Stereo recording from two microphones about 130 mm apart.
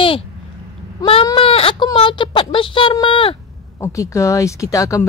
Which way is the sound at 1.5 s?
45° left (ahead or behind).